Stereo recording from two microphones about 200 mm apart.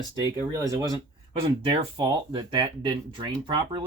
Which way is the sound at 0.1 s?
15° right (ahead or behind).